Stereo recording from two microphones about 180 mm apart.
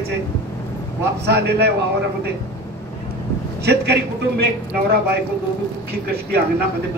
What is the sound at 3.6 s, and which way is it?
Speech, 65° right (ahead or behind).